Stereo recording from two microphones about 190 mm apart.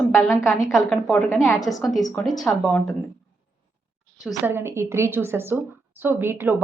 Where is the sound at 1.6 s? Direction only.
Centre (ahead or behind).